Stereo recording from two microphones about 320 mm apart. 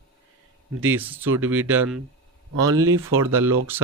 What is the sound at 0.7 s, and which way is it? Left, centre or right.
Speech, right.